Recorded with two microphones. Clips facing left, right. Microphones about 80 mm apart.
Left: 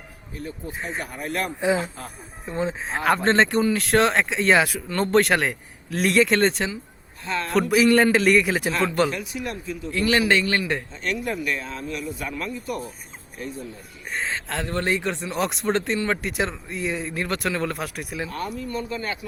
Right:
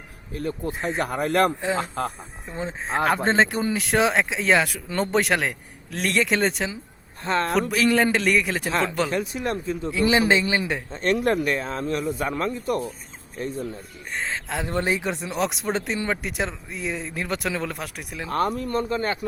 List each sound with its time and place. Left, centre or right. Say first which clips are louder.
0.3 s speech: right 5 dB; right
2.5 s speech: left 2 dB; centre
7.3 s speech: right 4 dB; right
7.7 s speech: left 6 dB; centre
9.0 s speech: right 3 dB; right
9.9 s speech: even; centre
10.9 s speech: right 6 dB; right
14.1 s speech: left 1 dB; centre
14.6 s speech: even; centre
18.3 s speech: right 6 dB; right